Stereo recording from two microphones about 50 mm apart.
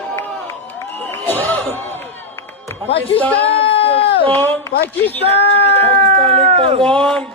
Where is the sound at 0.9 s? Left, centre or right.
Left.